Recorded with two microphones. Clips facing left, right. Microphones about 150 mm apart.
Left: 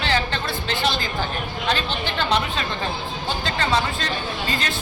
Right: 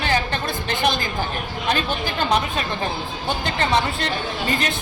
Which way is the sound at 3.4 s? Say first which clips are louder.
Right 1 dB; 20° right (ahead or behind).